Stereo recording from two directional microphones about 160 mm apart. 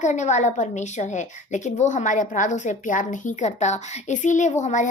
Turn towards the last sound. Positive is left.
turn(degrees=50)  # may be behind; listen again after turning